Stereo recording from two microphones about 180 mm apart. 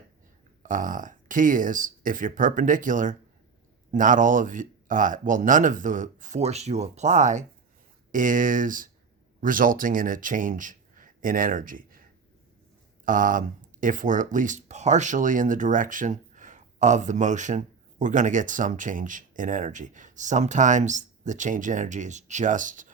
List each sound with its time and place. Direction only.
0.6 s speech: 45° right (ahead or behind)
13.1 s speech: 45° right (ahead or behind)